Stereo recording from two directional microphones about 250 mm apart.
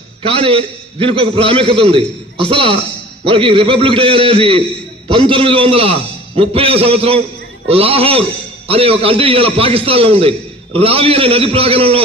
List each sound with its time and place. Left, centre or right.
0.2 s a man's voice: right